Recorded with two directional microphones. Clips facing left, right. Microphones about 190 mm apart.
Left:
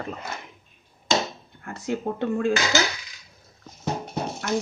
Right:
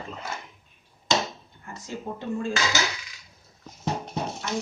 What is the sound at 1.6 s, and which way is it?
Speech, 65° left (ahead or behind).